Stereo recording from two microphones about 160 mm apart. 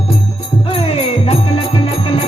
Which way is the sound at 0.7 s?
40° left (ahead or behind).